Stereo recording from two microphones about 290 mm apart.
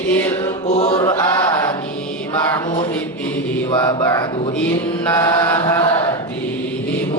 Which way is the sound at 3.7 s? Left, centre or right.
Centre.